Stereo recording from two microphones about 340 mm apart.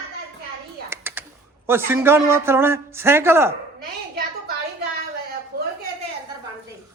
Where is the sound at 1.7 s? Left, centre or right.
Centre.